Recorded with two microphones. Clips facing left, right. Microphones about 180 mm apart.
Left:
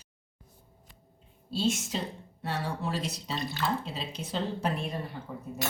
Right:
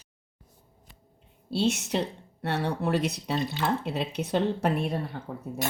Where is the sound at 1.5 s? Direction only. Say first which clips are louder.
Right 4 dB; 70° right (ahead or behind).